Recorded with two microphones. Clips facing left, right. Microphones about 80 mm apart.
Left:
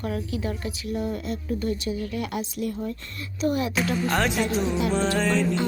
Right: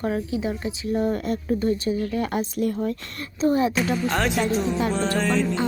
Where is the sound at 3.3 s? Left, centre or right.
Right.